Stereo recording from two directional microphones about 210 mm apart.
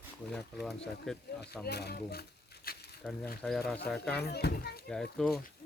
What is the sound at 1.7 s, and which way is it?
Speech, 50° left (ahead or behind).